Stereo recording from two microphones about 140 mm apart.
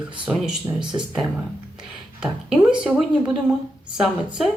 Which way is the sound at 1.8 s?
5° right (ahead or behind).